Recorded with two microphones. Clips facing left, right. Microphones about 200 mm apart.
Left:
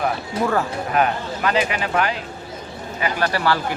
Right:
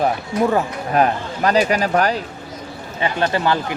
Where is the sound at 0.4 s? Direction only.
30° left (ahead or behind).